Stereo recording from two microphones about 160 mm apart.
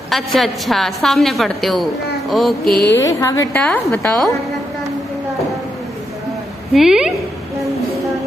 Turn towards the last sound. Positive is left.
turn(degrees=-5)  # may be behind; listen again after turning